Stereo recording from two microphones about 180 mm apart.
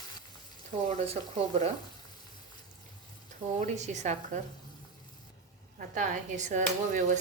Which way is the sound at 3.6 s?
40° right (ahead or behind).